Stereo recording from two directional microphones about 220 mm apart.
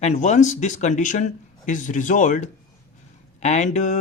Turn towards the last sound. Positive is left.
turn(degrees=35)  # may be behind; listen again after turning